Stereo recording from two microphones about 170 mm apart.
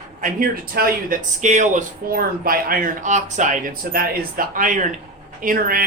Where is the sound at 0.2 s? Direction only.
55° right (ahead or behind).